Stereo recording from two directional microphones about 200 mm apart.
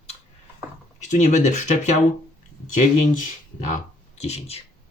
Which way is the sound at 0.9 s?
40° left (ahead or behind).